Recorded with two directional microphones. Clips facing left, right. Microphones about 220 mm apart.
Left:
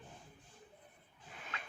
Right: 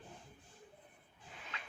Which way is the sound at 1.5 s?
50° left (ahead or behind).